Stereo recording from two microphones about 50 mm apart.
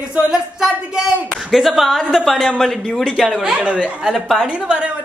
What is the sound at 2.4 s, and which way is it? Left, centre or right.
Speech, centre.